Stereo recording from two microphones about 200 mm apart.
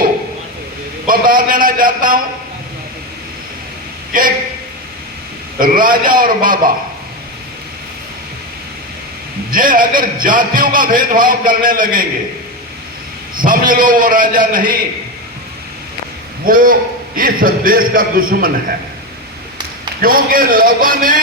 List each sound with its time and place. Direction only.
1.0 s a man's voice: 45° right (ahead or behind)
4.1 s a man's voice: 45° right (ahead or behind)
5.5 s a man's voice: 45° right (ahead or behind)
9.5 s a man's voice: 45° right (ahead or behind)
13.3 s a man's voice: 45° right (ahead or behind)
16.5 s a man's voice: 45° right (ahead or behind)
20.0 s a man's voice: 45° right (ahead or behind)